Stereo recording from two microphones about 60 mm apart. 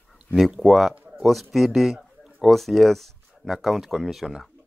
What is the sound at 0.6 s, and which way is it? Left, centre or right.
Speech, centre.